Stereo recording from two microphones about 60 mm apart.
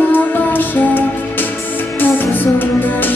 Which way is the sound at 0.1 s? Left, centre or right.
Left.